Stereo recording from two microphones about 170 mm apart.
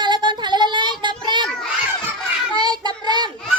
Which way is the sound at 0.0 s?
25° right (ahead or behind).